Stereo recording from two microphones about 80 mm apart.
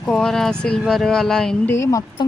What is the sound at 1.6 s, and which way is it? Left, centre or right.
Speech, left.